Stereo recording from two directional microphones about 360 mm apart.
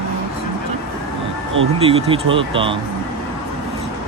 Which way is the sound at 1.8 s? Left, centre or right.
Centre.